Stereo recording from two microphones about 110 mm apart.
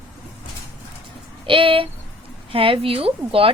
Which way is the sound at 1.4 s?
50° right (ahead or behind).